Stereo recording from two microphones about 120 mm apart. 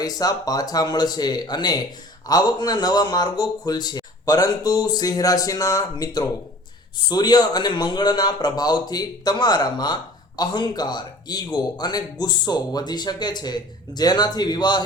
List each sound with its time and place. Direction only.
0.0 s speech: 30° left (ahead or behind)